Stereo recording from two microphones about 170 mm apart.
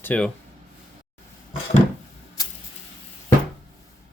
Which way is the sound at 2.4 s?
20° left (ahead or behind).